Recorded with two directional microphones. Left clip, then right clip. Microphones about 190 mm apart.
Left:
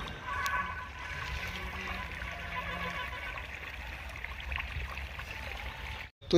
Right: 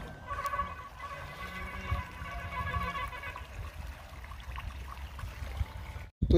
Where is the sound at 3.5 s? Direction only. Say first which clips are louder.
Left 7 dB; 75° right (ahead or behind).